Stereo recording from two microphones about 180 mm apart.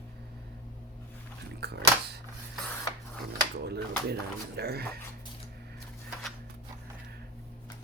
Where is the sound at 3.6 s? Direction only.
65° right (ahead or behind).